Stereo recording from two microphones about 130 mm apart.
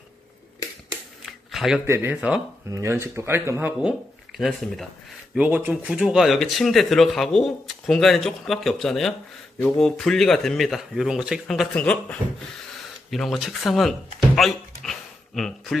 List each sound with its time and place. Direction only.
1.5 s a sound: centre (ahead or behind)
1.9 s speech: 15° right (ahead or behind)
2.7 s speech: 20° right (ahead or behind)
4.4 s speech: centre (ahead or behind)
5.3 s speech: 10° right (ahead or behind)
5.9 s speech: centre (ahead or behind)